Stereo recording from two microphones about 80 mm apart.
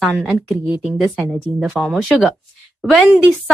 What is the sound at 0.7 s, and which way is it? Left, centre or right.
Speech, centre.